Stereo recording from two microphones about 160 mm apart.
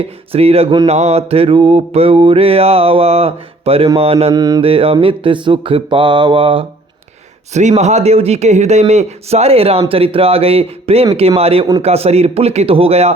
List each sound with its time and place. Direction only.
0.0 s mantra: 40° right (ahead or behind)
4.4 s mantra: 25° right (ahead or behind)
4.6 s mantra: 35° right (ahead or behind)
7.5 s a man's voice: 45° right (ahead or behind)
9.9 s mantra: 35° right (ahead or behind)